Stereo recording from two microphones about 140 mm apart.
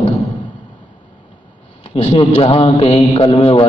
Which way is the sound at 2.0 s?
45° left (ahead or behind).